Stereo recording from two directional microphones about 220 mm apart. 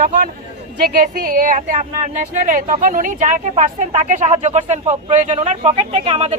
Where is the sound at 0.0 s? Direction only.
35° right (ahead or behind).